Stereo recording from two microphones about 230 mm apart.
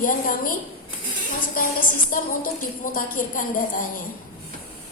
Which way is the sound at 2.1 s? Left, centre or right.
Left.